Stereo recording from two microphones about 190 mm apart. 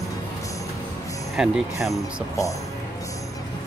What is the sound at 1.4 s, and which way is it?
Speech, 5° right (ahead or behind).